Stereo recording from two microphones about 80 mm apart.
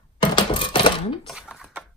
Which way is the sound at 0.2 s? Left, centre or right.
Left.